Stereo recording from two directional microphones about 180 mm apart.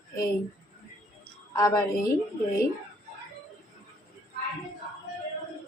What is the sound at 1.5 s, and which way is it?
Speech, 20° left (ahead or behind).